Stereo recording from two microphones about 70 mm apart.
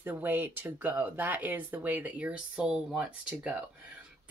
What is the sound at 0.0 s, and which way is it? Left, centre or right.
Speech, right.